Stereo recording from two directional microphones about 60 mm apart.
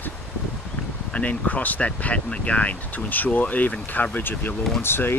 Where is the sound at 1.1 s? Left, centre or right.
Left.